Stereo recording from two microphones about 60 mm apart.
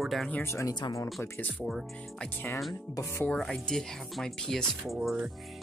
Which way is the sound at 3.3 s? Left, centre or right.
Centre.